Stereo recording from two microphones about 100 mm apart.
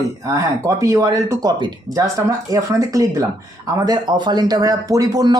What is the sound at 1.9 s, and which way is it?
Speech, 35° right (ahead or behind).